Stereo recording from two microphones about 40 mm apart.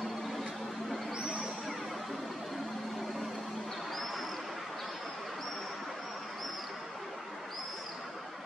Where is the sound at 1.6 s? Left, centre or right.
Centre.